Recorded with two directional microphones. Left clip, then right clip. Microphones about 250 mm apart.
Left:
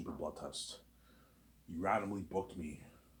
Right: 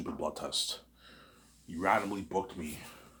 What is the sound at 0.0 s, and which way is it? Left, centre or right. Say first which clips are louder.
Speech: right 7 dB; right.